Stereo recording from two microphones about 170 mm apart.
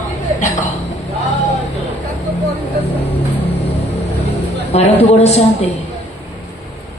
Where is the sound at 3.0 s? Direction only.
35° left (ahead or behind).